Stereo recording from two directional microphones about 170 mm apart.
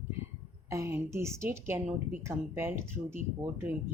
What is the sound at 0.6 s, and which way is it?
Speech, 15° right (ahead or behind).